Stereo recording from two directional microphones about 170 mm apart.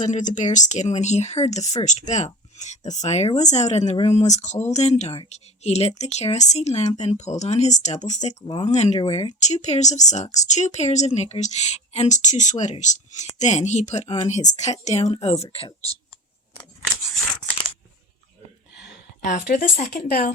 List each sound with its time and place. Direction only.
0.0 s a woman's voice: 45° left (ahead or behind)
8.4 s speech: 25° left (ahead or behind)
8.6 s a woman's voice: 40° left (ahead or behind)
9.0 s a woman's voice: 30° left (ahead or behind)
19.5 s speech: 50° left (ahead or behind)
19.9 s a woman's voice: 70° left (ahead or behind)